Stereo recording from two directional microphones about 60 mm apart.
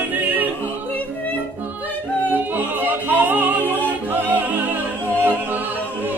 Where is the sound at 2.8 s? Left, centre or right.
Right.